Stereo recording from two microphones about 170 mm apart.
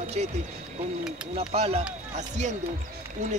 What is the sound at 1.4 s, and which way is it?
Speech, 35° right (ahead or behind).